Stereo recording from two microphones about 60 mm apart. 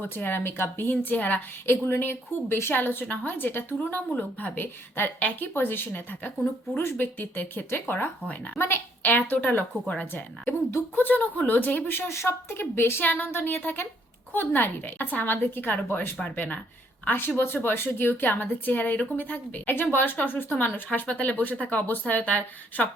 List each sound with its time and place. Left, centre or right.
0.0 s a woman's voice: left
1.6 s a woman's voice: left
8.5 s a woman's voice: left
9.1 s a woman's voice: left